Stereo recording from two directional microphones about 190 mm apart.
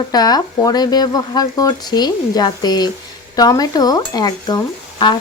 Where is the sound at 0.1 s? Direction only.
20° left (ahead or behind).